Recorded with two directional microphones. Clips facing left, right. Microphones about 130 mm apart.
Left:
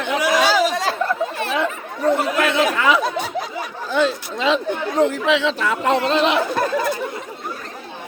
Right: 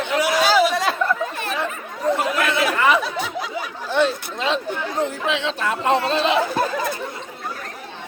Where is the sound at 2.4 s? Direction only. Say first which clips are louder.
Even; 90° left.